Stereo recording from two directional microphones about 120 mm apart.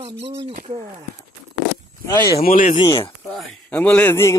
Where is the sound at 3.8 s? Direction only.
15° left (ahead or behind).